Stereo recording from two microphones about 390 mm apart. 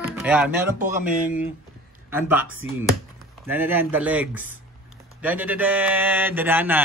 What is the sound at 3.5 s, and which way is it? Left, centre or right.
A man's voice, centre.